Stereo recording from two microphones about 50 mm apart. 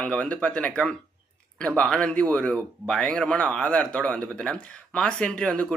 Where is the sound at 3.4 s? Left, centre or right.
Left.